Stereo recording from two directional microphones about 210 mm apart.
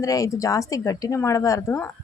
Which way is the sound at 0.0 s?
15° left (ahead or behind).